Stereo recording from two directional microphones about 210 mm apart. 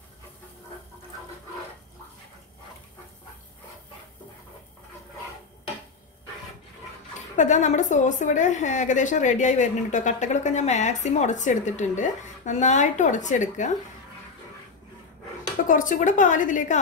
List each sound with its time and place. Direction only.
7.3 s a woman's voice: 35° left (ahead or behind)
15.7 s a woman's voice: 40° left (ahead or behind)